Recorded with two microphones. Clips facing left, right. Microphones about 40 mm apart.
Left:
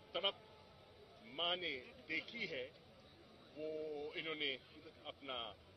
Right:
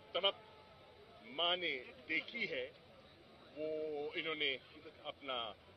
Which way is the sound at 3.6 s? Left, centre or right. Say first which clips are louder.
Right 4 dB; right.